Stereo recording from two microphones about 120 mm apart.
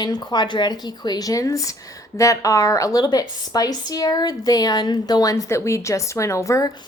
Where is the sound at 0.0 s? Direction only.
35° left (ahead or behind).